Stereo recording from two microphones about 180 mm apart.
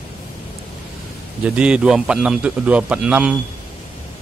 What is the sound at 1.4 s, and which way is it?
A man's voice, 5° right (ahead or behind).